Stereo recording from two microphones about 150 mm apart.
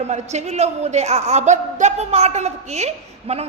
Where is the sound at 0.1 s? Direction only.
50° right (ahead or behind).